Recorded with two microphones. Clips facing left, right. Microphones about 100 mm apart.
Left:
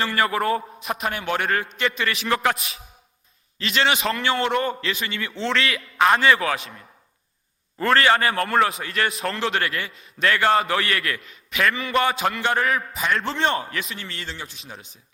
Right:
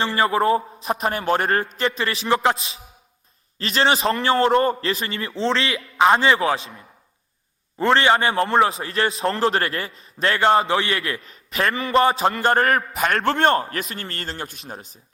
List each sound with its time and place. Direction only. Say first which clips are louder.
0.0 s a man's voice: right 3 dB; 30° right (ahead or behind)
7.8 s a man's voice: right 2 dB; 25° right (ahead or behind); by 12.8 s 45° right (ahead or behind)
13.0 s a man's voice: right 4 dB; 60° right (ahead or behind)